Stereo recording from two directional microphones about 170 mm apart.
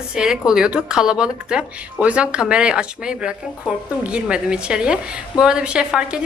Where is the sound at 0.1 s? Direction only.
5° right (ahead or behind).